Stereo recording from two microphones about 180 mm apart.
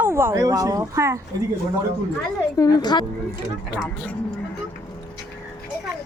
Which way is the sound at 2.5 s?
20° left (ahead or behind).